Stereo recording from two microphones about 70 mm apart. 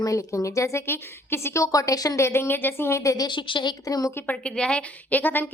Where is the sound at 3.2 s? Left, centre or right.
Left.